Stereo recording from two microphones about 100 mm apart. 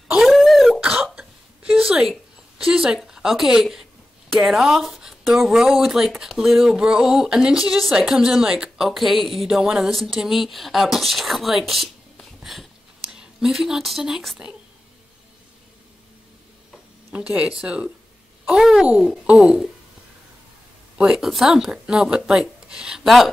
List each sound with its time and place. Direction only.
0.1 s throat clearing: centre (ahead or behind)
1.0 s hiccup: 10° right (ahead or behind)
2.6 s speech: 5° right (ahead or behind)
17.1 s speech: 10° right (ahead or behind)
21.0 s speech: 5° right (ahead or behind)